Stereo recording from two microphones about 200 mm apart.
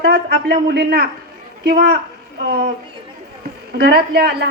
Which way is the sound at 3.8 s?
50° right (ahead or behind).